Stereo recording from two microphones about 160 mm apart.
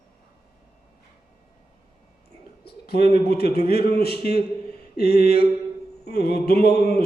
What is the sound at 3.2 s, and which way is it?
Speech, 80° left.